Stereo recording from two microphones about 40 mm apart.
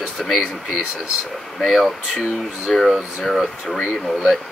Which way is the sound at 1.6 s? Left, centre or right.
Centre.